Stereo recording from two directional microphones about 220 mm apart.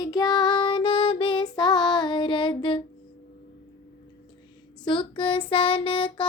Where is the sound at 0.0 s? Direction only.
15° left (ahead or behind).